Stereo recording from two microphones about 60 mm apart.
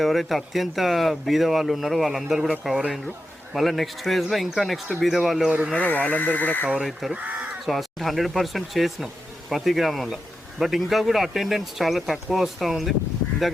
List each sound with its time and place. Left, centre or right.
0.0 s speech: centre
5.5 s speech: centre
5.7 s speech: left
7.1 s speech: right
7.6 s speech: centre